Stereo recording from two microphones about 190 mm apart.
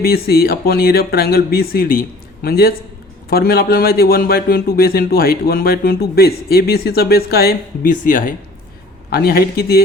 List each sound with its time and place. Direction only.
0.0 s a man's voice: 55° left (ahead or behind)